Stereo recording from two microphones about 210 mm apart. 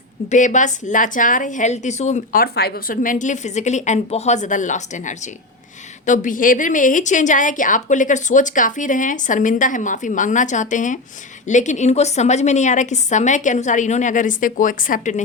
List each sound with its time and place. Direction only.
0.3 s a woman's voice: 35° left (ahead or behind)